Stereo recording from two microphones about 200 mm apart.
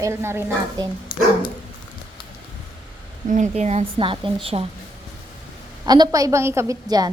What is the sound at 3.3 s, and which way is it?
A woman's voice, 35° right (ahead or behind).